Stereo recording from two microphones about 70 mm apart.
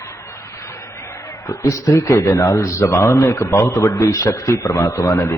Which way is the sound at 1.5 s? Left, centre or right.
Left.